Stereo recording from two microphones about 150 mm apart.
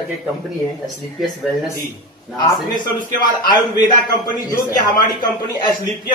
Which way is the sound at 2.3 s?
30° left (ahead or behind).